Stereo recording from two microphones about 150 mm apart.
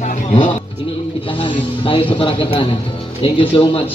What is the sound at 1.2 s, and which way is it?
Speech, 35° left (ahead or behind).